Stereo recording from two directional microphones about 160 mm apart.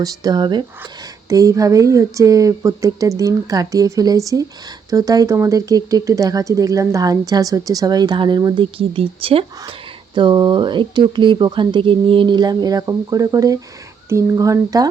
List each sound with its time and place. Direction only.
0.0 s speech: 25° right (ahead or behind)